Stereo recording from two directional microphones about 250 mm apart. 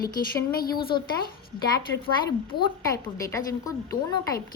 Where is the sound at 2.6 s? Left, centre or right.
Centre.